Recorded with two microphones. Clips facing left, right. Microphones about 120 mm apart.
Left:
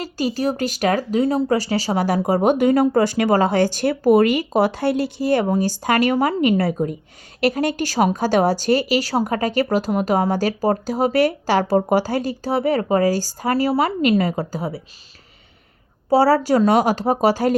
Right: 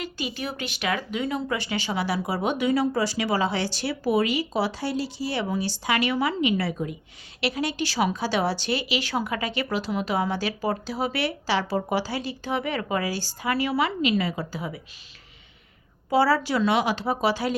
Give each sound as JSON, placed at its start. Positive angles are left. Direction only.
{"t": 0.0, "sound": "a woman's voice", "side_deg": 40}
{"t": 16.0, "sound": "a woman's voice", "side_deg": 40}